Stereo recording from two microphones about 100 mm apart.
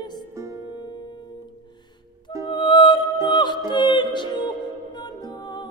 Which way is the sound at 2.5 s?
55° left (ahead or behind).